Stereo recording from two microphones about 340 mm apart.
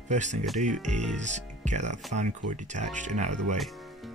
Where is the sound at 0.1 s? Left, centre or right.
Right.